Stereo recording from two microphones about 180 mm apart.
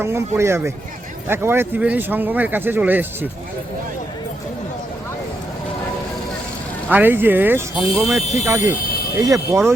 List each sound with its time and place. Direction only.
0.3 s speech: 15° right (ahead or behind)
6.9 s speech: 10° right (ahead or behind)
8.4 s speech: 15° right (ahead or behind)